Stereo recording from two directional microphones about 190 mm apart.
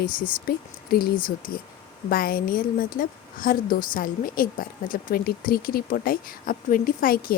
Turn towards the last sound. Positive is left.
turn(degrees=50)  # may be behind; listen again after turning